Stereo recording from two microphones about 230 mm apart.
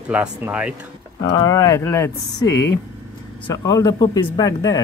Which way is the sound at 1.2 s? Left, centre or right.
Centre.